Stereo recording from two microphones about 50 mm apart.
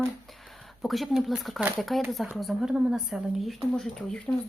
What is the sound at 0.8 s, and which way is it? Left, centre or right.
Speech, centre.